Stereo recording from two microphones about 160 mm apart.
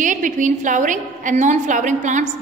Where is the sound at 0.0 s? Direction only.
55° right (ahead or behind).